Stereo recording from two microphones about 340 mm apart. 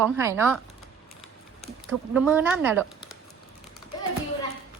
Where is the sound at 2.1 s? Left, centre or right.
Centre.